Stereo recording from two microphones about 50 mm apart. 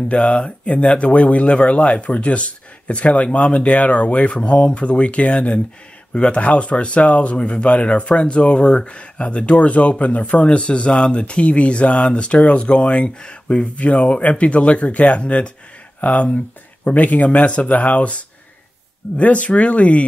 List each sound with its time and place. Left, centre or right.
0.1 s speech: left